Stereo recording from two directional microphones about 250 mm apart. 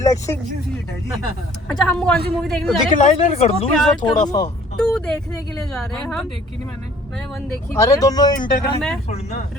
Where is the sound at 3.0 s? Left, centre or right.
Left.